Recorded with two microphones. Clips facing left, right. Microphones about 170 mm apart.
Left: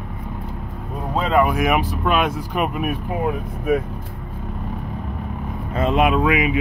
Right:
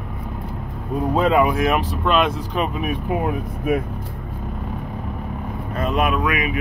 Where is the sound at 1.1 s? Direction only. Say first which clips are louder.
Right 1 dB; 5° right (ahead or behind).